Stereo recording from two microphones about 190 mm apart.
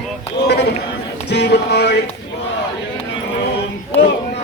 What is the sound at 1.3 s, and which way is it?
Music, 60° left (ahead or behind).